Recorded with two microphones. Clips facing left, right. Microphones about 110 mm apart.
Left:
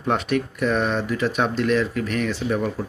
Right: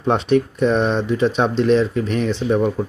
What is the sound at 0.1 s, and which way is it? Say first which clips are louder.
Speech: right 6 dB; 30° right (ahead or behind).